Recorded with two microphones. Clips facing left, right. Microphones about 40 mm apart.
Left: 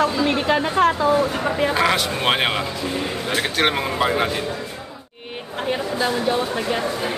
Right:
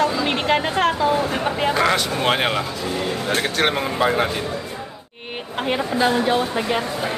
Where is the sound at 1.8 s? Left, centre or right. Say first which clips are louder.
Even; centre.